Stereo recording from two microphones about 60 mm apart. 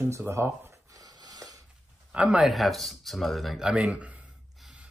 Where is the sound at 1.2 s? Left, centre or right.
Right.